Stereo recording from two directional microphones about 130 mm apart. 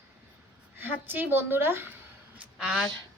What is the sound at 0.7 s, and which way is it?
Speech, 15° right (ahead or behind).